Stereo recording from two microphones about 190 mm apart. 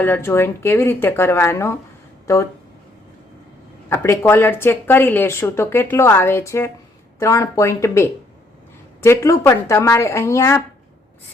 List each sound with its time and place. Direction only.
0.0 s a woman's voice: 10° left (ahead or behind)
3.8 s a woman's voice: 15° left (ahead or behind)